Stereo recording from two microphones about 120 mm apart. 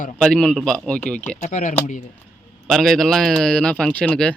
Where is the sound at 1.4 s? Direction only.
90° left.